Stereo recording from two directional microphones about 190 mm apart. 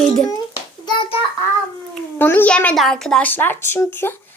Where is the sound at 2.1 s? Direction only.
10° left (ahead or behind).